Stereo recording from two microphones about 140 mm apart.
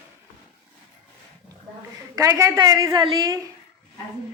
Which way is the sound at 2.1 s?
20° right (ahead or behind).